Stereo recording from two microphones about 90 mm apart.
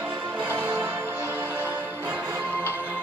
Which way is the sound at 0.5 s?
20° right (ahead or behind).